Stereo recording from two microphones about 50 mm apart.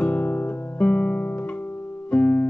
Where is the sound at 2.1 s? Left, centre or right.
Left.